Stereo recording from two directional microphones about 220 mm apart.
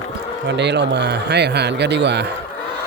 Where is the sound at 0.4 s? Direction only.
50° right (ahead or behind).